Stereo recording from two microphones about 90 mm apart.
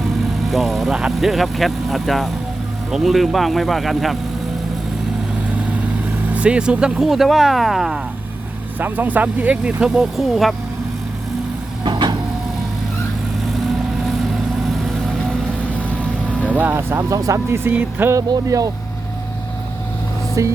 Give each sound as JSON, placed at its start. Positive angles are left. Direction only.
{"t": 0.5, "sound": "speech", "side_deg": 0}
{"t": 6.3, "sound": "speech", "side_deg": -15}
{"t": 8.8, "sound": "speech", "side_deg": -20}
{"t": 11.9, "sound": "vehicle", "side_deg": -60}
{"t": 16.4, "sound": "speech", "side_deg": -20}
{"t": 18.3, "sound": "speech", "side_deg": -40}
{"t": 20.4, "sound": "speech", "side_deg": -35}